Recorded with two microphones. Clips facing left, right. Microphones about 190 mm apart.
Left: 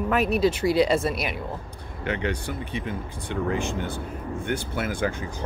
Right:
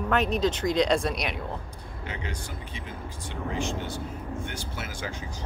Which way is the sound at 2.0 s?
65° left (ahead or behind).